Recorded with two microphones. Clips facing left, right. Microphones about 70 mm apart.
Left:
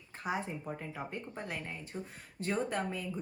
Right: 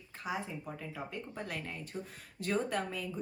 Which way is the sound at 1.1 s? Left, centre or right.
Left.